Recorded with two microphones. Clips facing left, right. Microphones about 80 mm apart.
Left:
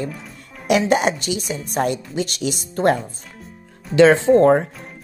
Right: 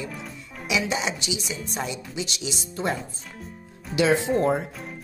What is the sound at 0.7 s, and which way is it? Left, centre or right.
Speech, left.